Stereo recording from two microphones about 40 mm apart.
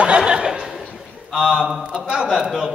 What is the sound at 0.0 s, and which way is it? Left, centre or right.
Laughter, right.